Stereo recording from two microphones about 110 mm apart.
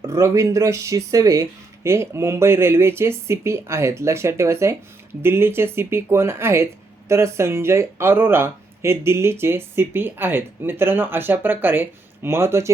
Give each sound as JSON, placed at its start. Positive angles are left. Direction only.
{"t": 0.0, "sound": "speech", "side_deg": -30}